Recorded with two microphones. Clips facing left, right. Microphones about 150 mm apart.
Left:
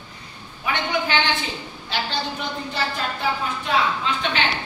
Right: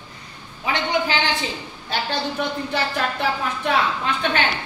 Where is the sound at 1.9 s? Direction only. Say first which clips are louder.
Right 2 dB; 55° right (ahead or behind).